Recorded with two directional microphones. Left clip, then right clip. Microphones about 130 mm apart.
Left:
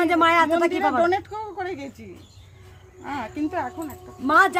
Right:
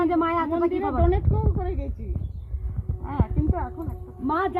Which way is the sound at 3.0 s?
35° left (ahead or behind).